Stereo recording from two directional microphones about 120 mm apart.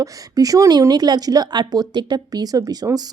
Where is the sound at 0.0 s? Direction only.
30° right (ahead or behind).